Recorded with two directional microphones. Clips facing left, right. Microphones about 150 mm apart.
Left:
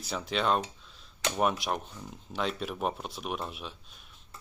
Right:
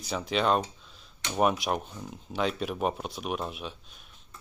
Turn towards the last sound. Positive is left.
turn(degrees=0)  # may be behind; listen again after turning